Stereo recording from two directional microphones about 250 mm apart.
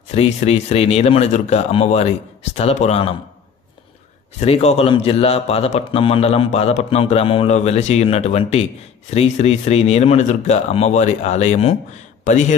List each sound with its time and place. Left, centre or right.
0.1 s a man's voice: left
4.4 s a man's voice: left